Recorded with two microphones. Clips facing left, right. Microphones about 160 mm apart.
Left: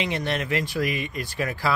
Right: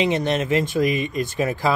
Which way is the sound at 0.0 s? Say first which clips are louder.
Right 6 dB; 20° right (ahead or behind).